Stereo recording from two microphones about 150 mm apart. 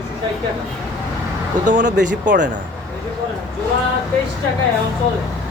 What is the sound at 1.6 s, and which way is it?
Speech, 60° right (ahead or behind).